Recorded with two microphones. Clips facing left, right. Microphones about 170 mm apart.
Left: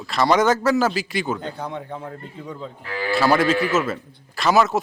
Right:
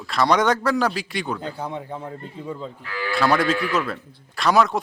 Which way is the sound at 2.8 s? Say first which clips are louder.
Left 2 dB; 40° left (ahead or behind).